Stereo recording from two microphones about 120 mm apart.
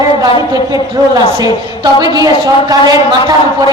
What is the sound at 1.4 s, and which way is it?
A woman's voice, 35° right (ahead or behind).